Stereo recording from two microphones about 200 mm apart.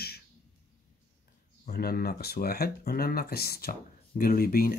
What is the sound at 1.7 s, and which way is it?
Speech, 50° left (ahead or behind).